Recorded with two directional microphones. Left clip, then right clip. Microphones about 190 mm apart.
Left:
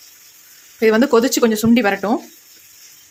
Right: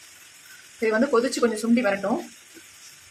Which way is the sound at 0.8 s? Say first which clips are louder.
Left 8 dB; 60° left (ahead or behind).